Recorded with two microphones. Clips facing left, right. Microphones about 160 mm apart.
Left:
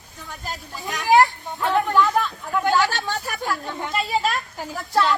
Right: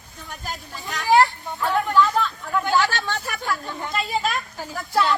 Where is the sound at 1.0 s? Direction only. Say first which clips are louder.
Left 1 dB; 20° left (ahead or behind).